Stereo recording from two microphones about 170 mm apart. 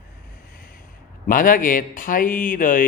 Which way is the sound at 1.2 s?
55° left (ahead or behind).